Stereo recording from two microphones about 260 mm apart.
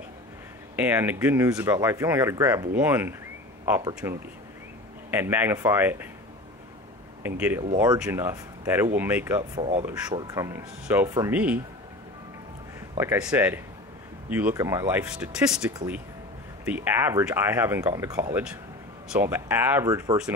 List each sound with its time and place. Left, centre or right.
0.7 s speech: centre
7.2 s speech: centre
9.4 s speech: right; by 11.6 s centre
12.9 s speech: centre